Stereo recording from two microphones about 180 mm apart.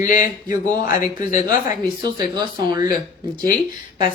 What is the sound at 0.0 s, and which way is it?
A man's voice, 45° left (ahead or behind).